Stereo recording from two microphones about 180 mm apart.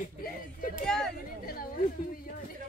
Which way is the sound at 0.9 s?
5° left (ahead or behind).